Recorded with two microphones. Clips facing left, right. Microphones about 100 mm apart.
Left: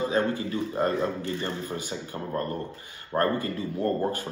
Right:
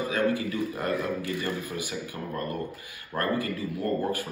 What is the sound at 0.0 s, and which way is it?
Speech, 25° left (ahead or behind).